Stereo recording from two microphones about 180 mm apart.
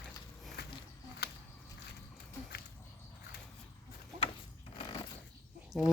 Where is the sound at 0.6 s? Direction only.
65° left (ahead or behind).